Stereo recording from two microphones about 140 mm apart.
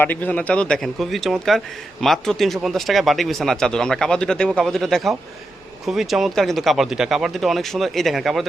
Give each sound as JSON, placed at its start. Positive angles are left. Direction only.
{"t": 0.0, "sound": "a man's voice", "side_deg": 10}